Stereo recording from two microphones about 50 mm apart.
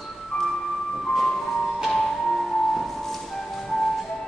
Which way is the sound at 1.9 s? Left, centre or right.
Centre.